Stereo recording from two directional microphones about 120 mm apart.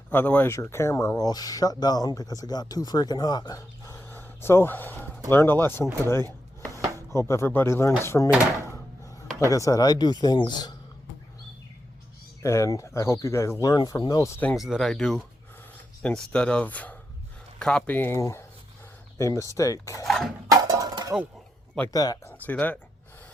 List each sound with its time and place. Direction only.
0.1 s speech: 15° left (ahead or behind); by 3.9 s 35° left (ahead or behind)
4.0 s a sound: 20° left (ahead or behind)
5.3 s speech: 20° left (ahead or behind)
9.4 s speech: 25° left (ahead or behind)
12.4 s speech: 25° left (ahead or behind)
14.5 s speech: centre (ahead or behind); by 20.1 s 25° left (ahead or behind)
20.5 s a sound: 30° right (ahead or behind)
21.9 s speech: 30° left (ahead or behind)
22.4 s speech: 10° left (ahead or behind)